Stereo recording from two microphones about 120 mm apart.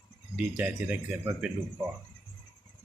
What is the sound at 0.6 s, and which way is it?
Speech, 10° right (ahead or behind).